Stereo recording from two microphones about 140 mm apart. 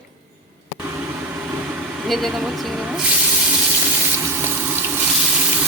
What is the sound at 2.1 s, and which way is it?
A woman's voice, centre (ahead or behind).